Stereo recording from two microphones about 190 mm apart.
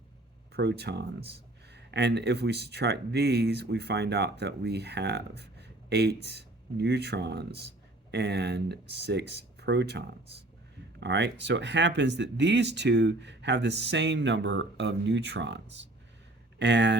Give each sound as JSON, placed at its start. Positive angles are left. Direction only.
{"t": 0.5, "sound": "speech", "side_deg": -60}
{"t": 11.0, "sound": "speech", "side_deg": -65}